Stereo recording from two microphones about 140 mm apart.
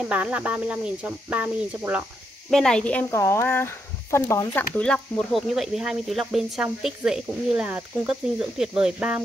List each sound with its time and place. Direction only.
0.0 s speech: 10° right (ahead or behind)
2.5 s speech: 5° left (ahead or behind)